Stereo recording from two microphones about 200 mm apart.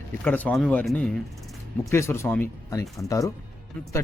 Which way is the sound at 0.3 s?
10° left (ahead or behind).